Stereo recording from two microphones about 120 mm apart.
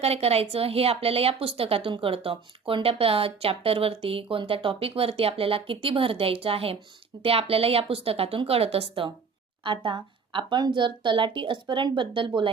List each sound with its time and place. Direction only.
0.0 s speech: 60° right (ahead or behind)
9.6 s speech: 45° right (ahead or behind)